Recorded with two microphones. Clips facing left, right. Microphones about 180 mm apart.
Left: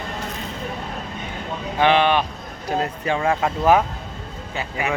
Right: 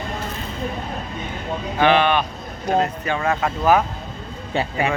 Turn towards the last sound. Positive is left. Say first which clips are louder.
# right 4 dB
turn(degrees=-30)  # may be behind; listen again after turning